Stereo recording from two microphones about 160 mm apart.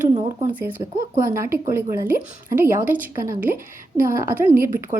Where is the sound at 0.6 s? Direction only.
20° right (ahead or behind).